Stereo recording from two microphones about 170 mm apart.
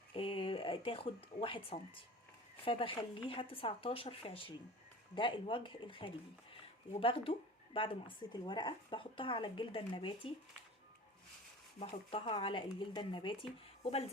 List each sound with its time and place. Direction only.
0.1 s speech: 30° left (ahead or behind)
11.8 s speech: 35° left (ahead or behind)